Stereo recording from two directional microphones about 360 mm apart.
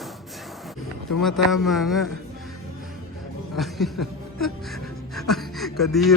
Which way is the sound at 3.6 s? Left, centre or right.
Centre.